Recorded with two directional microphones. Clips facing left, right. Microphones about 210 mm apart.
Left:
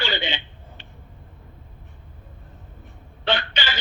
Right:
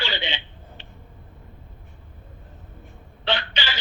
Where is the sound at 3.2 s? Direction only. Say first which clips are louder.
Left 2 dB; 50° left (ahead or behind).